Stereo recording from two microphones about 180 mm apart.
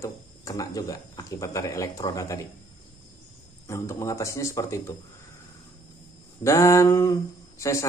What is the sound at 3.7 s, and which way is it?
Speech, 15° left (ahead or behind).